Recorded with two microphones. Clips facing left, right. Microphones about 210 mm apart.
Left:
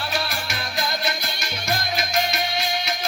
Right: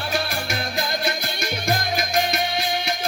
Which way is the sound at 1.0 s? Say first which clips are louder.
Right 3 dB; 50° right (ahead or behind).